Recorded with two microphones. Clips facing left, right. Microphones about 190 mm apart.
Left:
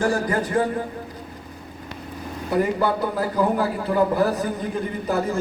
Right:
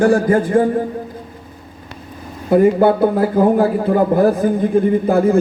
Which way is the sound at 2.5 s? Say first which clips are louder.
Right 10 dB; 50° right (ahead or behind).